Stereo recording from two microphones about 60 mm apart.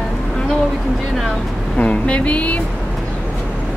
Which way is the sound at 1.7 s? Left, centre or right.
Left.